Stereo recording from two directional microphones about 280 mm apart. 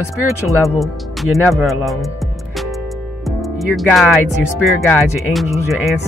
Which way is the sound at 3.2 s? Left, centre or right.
Centre.